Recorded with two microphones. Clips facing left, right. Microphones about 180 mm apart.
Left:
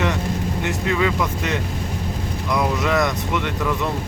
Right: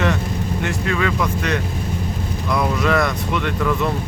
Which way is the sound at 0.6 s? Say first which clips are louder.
Left 1 dB; 20° left (ahead or behind).